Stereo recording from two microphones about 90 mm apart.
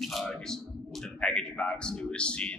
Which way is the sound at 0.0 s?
Centre (ahead or behind).